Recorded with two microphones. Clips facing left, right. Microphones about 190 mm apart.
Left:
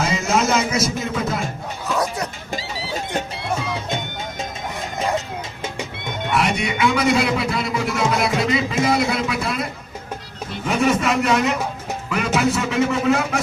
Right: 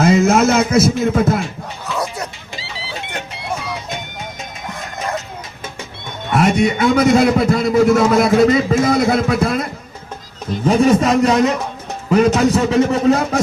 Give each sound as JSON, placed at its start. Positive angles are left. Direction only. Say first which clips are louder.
{"t": 0.0, "sound": "speech", "louder": "right 8 dB", "side_deg": -50}
{"t": 1.9, "sound": "bow-wow", "louder": "left 1 dB", "side_deg": 0}
{"t": 2.5, "sound": "music", "louder": "left 3 dB", "side_deg": 45}
{"t": 3.8, "sound": "music", "louder": "left 1 dB", "side_deg": 25}
{"t": 6.3, "sound": "a man's voice", "louder": "right 7 dB", "side_deg": -45}
{"t": 10.5, "sound": "a man's voice", "louder": "right 7 dB", "side_deg": -35}